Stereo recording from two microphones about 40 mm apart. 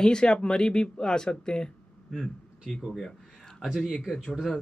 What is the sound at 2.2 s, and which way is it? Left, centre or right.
Speech, centre.